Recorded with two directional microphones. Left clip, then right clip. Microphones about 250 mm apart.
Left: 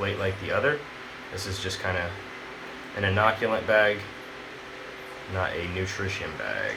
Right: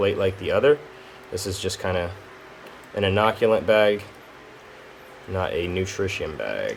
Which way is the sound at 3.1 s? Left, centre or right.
Right.